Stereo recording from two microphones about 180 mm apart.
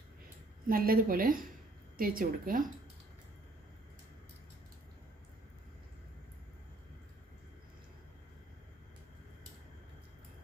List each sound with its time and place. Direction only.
0.7 s a woman's voice: 55° right (ahead or behind)